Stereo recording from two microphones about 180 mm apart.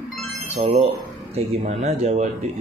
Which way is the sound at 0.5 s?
35° right (ahead or behind).